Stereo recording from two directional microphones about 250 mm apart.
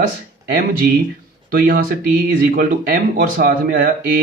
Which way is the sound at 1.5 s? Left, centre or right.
Right.